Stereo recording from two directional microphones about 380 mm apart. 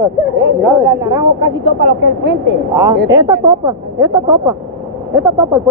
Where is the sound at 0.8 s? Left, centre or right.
Centre.